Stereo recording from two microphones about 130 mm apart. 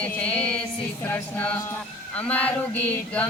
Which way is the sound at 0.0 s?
10° left (ahead or behind).